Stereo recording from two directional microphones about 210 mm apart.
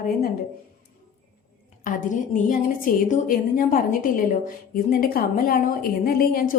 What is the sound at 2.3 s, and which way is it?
A woman's voice, 40° left (ahead or behind).